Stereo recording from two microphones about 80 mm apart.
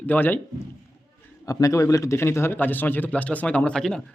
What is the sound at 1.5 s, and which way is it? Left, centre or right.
A man's voice, left.